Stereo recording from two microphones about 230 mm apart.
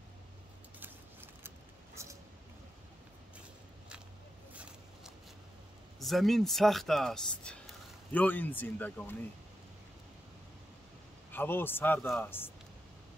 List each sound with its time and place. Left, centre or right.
0.7 s a sound: centre
5.9 s a man's voice: centre
11.3 s a man's voice: centre